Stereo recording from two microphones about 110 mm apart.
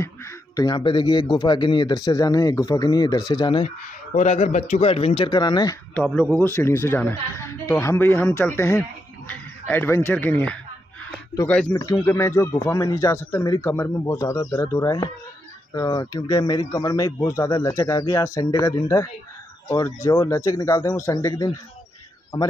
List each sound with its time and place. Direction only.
0.0 s a sound: 25° left (ahead or behind)
0.7 s speech: 45° left (ahead or behind)
3.6 s speech: 90° left; by 5.8 s 40° left (ahead or behind)
6.3 s speech: 20° left (ahead or behind)
11.7 s speech: 30° left (ahead or behind)
13.7 s speech: 20° left (ahead or behind)
14.1 s speech: 35° left (ahead or behind)